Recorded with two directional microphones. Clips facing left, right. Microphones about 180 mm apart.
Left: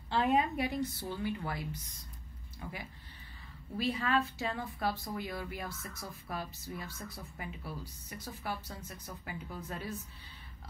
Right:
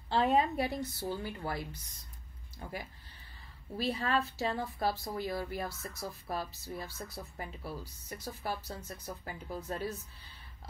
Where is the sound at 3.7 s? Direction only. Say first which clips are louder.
Even; 35° right (ahead or behind).